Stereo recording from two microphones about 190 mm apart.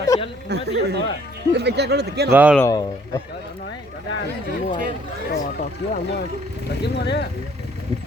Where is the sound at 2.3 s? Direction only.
5° right (ahead or behind).